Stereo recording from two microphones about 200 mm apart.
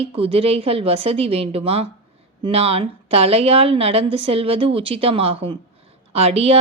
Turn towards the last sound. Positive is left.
turn(degrees=-30)  # may be behind; listen again after turning